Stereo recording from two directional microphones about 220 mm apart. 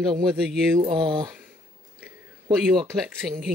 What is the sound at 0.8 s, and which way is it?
Speech, 20° right (ahead or behind).